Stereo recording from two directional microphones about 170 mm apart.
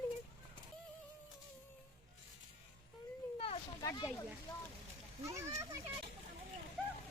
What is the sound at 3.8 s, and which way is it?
Speech, 20° left (ahead or behind).